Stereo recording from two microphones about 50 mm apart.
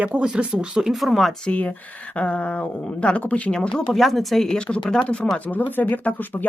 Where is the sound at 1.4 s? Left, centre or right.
Left.